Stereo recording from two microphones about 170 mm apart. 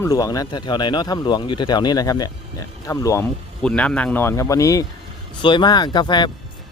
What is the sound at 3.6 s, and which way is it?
Speech, 5° left (ahead or behind).